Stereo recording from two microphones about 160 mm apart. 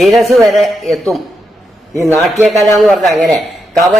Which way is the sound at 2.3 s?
Centre (ahead or behind).